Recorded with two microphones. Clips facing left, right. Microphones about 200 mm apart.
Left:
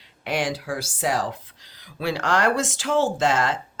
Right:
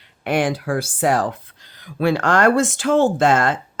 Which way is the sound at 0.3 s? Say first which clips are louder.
Right 6 dB; 55° right (ahead or behind).